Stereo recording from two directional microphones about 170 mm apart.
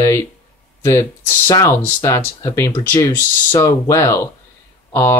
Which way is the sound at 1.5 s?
15° left (ahead or behind).